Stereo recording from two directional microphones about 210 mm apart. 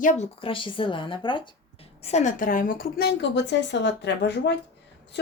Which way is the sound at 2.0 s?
35° left (ahead or behind).